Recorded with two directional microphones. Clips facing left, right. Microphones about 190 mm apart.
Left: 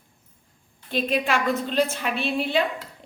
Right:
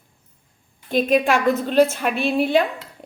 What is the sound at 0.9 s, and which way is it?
A woman's voice, 50° right (ahead or behind).